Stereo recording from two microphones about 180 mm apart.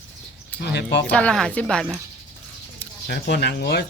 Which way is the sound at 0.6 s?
65° left (ahead or behind).